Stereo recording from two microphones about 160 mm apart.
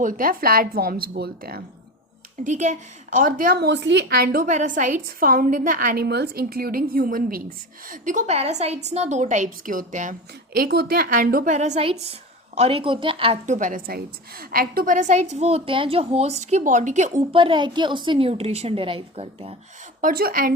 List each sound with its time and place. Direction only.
0.0 s a woman's voice: 60° right (ahead or behind); by 1.6 s 80° right
2.4 s a woman's voice: 50° right (ahead or behind)
3.2 s a woman's voice: 60° right (ahead or behind)
4.5 s a woman's voice: 55° right (ahead or behind)
11.5 s a woman's voice: 45° right (ahead or behind)
17.3 s a woman's voice: 30° right (ahead or behind)
20.0 s a woman's voice: 65° right (ahead or behind)